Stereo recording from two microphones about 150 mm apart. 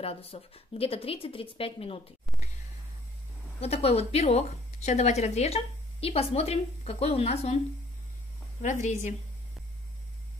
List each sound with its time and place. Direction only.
0.0 s speech: 40° left (ahead or behind)
3.6 s a woman's voice: 45° left (ahead or behind)
8.6 s a woman's voice: 55° left (ahead or behind)